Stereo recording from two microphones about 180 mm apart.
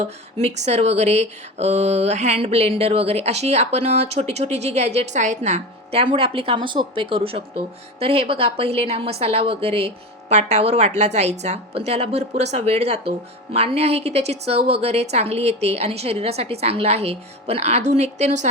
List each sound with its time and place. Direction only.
0.0 s speech: 35° right (ahead or behind)